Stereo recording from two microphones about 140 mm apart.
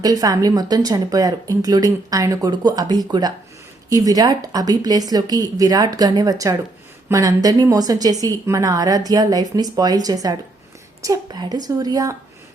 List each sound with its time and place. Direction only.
0.0 s speech: 25° right (ahead or behind)